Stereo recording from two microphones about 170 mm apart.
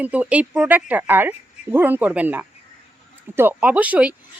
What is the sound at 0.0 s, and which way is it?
Speech, 10° right (ahead or behind).